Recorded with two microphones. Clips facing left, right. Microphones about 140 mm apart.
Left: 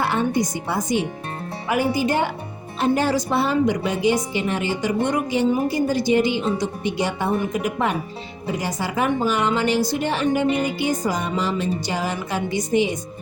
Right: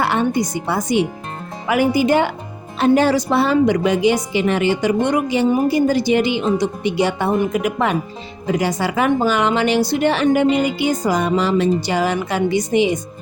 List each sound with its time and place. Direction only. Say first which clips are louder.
0.0 s a woman's voice: right 3 dB; 80° right